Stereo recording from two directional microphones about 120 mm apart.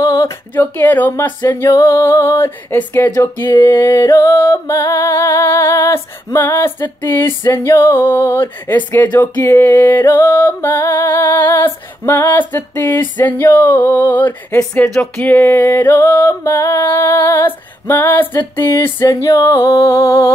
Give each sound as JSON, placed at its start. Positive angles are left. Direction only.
{"t": 0.0, "sound": "music", "side_deg": 25}